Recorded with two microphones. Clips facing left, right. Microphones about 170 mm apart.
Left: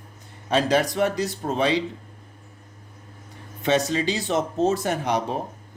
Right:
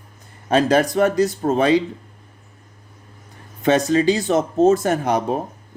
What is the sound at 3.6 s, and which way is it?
Speech, 50° right (ahead or behind).